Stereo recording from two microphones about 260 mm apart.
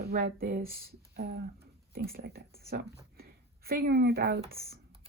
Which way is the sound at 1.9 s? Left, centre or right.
Right.